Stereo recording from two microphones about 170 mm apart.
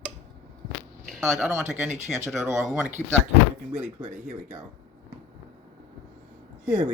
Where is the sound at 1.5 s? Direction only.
Centre (ahead or behind).